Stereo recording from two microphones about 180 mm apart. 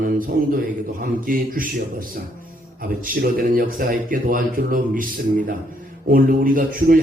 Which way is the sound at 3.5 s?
50° right (ahead or behind).